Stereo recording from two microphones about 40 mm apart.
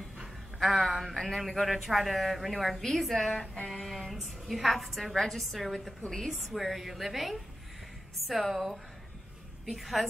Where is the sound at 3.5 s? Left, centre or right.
Left.